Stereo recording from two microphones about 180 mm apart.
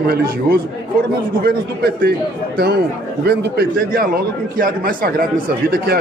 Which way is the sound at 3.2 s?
60° right (ahead or behind).